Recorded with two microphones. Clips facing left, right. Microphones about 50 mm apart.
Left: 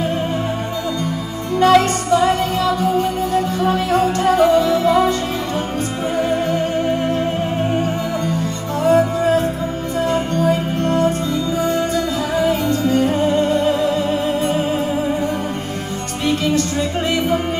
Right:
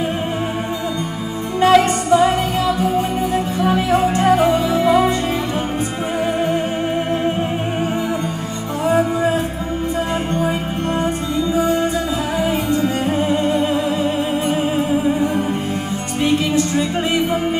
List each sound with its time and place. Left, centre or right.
1.6 s music: centre
6.1 s music: centre
8.8 s music: centre